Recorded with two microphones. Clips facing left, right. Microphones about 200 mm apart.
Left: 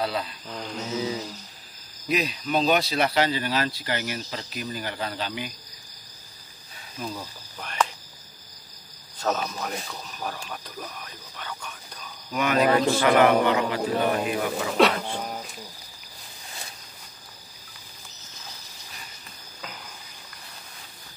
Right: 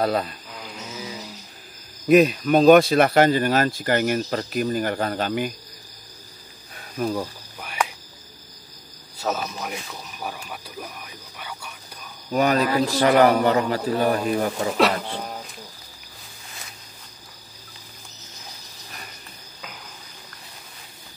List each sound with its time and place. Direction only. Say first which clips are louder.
0.0 s speech: right 6 dB; 50° right (ahead or behind)
0.5 s speech: left 4 dB; 5° right (ahead or behind)
2.0 s speech: right 11 dB; 50° right (ahead or behind)
6.7 s cricket: right 9 dB; 55° right (ahead or behind)
7.6 s cricket: even; 10° right (ahead or behind)
9.2 s speech: even; 5° right (ahead or behind)
12.3 s a man's voice: right 1 dB; 40° right (ahead or behind)
14.8 s speech: left 1 dB; centre (ahead or behind)